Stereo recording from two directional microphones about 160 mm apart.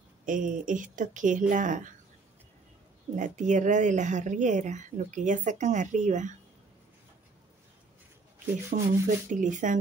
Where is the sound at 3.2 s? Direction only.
50° right (ahead or behind).